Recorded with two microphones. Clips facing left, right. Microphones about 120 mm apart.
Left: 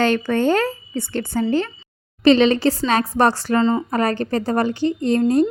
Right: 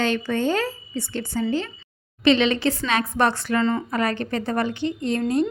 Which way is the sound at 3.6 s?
20° left (ahead or behind).